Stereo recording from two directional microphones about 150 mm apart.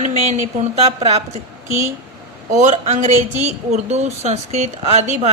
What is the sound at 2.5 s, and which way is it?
Speech, 55° right (ahead or behind).